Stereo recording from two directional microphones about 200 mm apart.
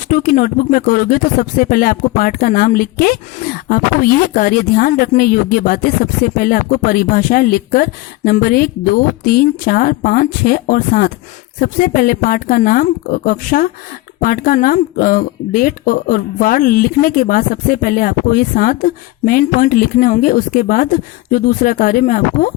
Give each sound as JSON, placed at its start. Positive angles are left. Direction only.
{"t": 0.1, "sound": "speech", "side_deg": 45}